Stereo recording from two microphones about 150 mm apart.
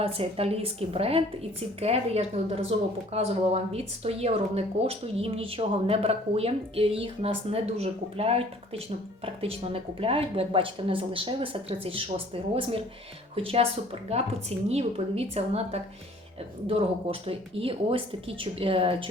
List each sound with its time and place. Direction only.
0.0 s a woman's voice: 40° right (ahead or behind)